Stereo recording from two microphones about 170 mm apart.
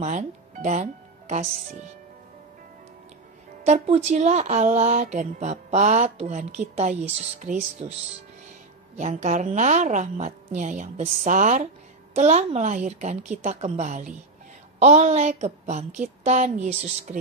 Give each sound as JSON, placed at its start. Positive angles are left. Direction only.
{"t": 0.0, "sound": "speech", "side_deg": -45}
{"t": 3.6, "sound": "a woman's voice", "side_deg": -40}
{"t": 8.9, "sound": "a woman's voice", "side_deg": -45}